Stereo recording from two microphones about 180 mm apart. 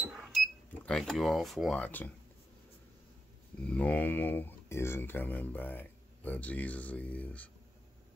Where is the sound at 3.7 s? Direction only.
10° left (ahead or behind).